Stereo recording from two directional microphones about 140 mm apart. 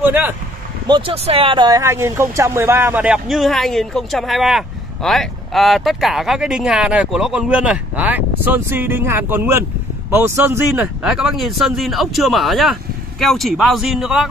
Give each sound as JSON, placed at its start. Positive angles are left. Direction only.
{"t": 0.0, "sound": "speech", "side_deg": -15}
{"t": 0.8, "sound": "speech", "side_deg": -30}
{"t": 1.1, "sound": "speech", "side_deg": -45}
{"t": 1.7, "sound": "speech", "side_deg": -20}